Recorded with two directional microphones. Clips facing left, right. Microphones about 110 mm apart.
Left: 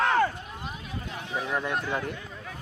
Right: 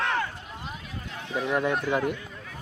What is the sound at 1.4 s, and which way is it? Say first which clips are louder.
Speech: right 5 dB; 5° right (ahead or behind).